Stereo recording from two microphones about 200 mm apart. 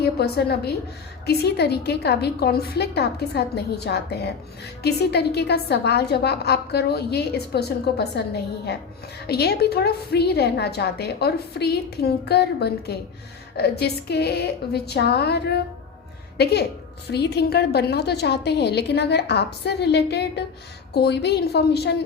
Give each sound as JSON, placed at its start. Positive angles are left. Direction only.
{"t": 0.0, "sound": "a woman's voice", "side_deg": 55}